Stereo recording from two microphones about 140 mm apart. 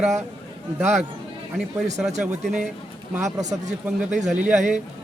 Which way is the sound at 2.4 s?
5° right (ahead or behind).